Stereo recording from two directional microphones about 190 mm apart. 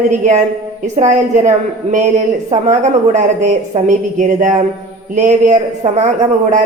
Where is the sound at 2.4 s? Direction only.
35° right (ahead or behind).